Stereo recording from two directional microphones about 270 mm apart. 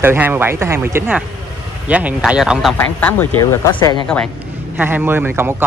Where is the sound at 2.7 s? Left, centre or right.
Centre.